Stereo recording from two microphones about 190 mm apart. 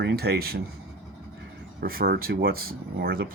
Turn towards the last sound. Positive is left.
turn(degrees=-50)  # may be behind; listen again after turning